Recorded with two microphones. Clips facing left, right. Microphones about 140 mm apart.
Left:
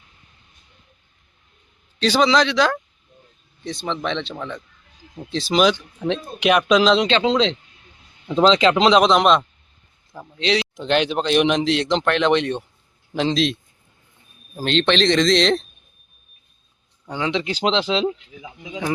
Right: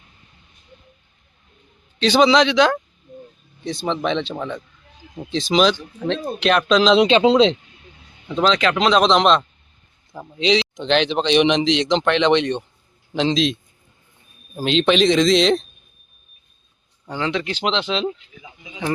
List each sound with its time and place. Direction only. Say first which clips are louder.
2.0 s speech: right 3 dB; centre (ahead or behind)
6.9 s speech: right 4 dB; 10° right (ahead or behind)
8.3 s speech: left 3 dB; 25° left (ahead or behind)
9.0 s speech: even; 5° left (ahead or behind)
10.1 s speech: right 3 dB; 5° right (ahead or behind)
10.6 s speech: right 1 dB; 10° left (ahead or behind)
17.1 s speech: even; 15° left (ahead or behind)
17.6 s speech: left 3 dB; 35° left (ahead or behind)